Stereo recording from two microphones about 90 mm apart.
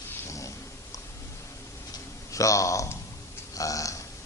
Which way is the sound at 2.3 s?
35° left (ahead or behind).